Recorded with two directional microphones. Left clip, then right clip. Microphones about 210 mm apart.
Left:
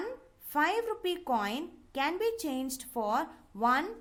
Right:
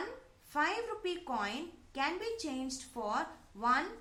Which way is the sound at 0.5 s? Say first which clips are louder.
Left 5 dB; 50° left (ahead or behind).